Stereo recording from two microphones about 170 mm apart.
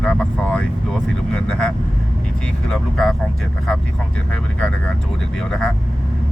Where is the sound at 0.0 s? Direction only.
5° left (ahead or behind).